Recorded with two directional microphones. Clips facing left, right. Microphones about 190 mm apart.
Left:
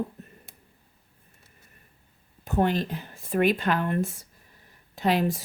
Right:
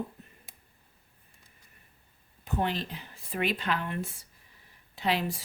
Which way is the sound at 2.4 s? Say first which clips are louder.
Left 6 dB; 45° left (ahead or behind).